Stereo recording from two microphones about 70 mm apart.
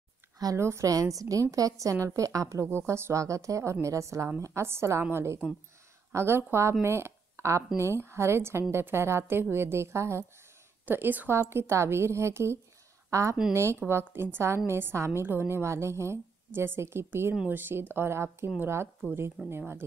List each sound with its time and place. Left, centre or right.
0.6 s speech: right
0.8 s a woman's voice: right
2.7 s speech: right
10.9 s a woman's voice: right